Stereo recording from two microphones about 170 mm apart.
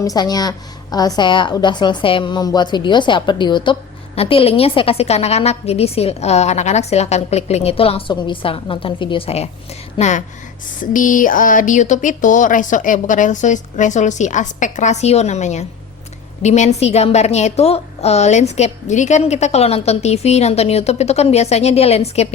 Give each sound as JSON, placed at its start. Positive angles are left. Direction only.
{"t": 0.0, "sound": "a woman's voice", "side_deg": 20}